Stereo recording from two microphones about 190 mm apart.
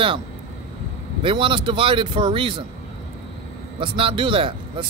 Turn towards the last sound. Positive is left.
turn(degrees=-25)  # may be behind; listen again after turning